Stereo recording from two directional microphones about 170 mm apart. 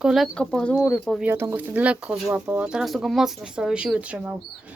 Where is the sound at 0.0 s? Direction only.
Centre (ahead or behind).